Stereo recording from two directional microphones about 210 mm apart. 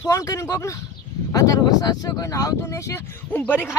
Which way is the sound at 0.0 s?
15° left (ahead or behind).